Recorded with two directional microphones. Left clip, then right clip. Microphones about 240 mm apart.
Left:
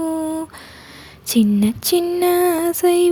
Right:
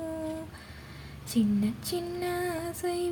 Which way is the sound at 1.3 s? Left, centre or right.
Left.